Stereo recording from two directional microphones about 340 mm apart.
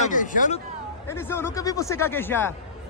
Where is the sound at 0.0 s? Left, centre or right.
Left.